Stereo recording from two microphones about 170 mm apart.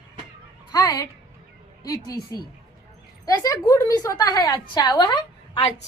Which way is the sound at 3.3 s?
20° left (ahead or behind).